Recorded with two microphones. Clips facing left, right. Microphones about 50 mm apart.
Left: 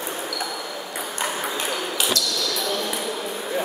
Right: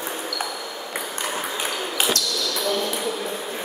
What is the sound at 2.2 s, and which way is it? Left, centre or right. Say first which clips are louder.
Basketball bounce: left 1 dB; right.